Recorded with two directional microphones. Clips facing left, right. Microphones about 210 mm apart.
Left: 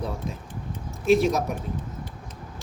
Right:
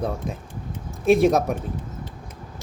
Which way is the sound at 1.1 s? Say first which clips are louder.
Right 3 dB; 55° right (ahead or behind).